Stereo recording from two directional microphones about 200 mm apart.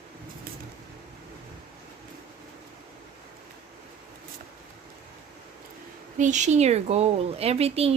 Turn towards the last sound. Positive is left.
turn(degrees=-30)  # may be behind; listen again after turning